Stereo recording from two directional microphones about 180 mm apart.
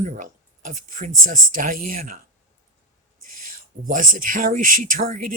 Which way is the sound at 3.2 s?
50° right (ahead or behind).